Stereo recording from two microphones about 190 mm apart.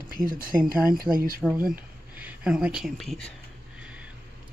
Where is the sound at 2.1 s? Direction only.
5° right (ahead or behind).